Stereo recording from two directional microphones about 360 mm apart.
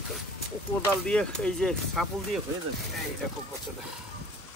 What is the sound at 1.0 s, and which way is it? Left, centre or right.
Speech, centre.